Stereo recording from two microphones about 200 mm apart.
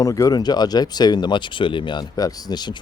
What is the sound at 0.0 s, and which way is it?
Speech, 15° left (ahead or behind).